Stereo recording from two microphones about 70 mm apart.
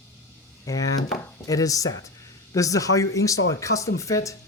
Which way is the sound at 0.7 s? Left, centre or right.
Left.